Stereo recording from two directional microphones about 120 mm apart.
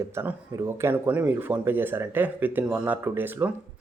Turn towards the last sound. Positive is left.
turn(degrees=-15)  # may be behind; listen again after turning